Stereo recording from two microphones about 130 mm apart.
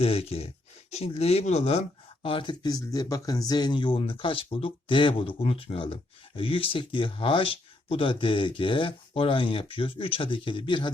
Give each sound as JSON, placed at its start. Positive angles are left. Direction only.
{"t": 0.0, "sound": "speech", "side_deg": 50}